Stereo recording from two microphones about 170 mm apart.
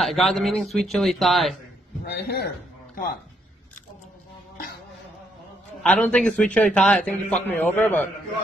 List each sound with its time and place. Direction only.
0.0 s speech: centre (ahead or behind)
2.0 s a man's voice: 65° left (ahead or behind)
5.8 s a man's voice: 10° left (ahead or behind)